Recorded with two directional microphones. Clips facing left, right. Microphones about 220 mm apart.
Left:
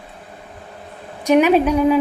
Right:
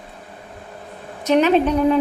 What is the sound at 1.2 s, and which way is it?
Speech, 10° left (ahead or behind).